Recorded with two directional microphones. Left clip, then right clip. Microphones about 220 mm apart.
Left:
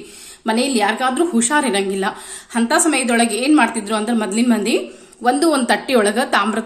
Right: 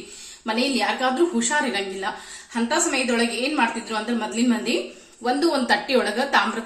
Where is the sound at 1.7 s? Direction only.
50° left (ahead or behind).